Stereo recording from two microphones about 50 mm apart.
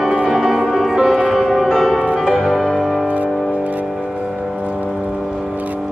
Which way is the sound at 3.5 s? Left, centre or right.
Right.